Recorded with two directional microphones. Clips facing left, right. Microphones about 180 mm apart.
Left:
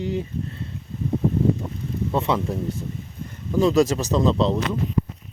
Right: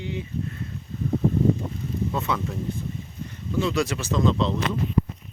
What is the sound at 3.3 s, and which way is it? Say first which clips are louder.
Speech: left 6 dB; 40° left (ahead or behind).